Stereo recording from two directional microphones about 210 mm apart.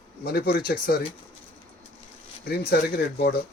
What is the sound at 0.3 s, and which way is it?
Speech, 45° left (ahead or behind).